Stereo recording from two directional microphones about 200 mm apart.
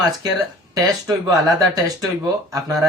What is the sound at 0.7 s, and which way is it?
Speech, 15° right (ahead or behind).